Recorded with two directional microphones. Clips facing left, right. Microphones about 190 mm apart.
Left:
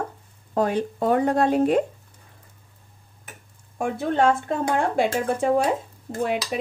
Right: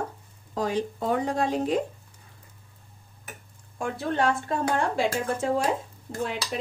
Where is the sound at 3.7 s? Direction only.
50° left (ahead or behind).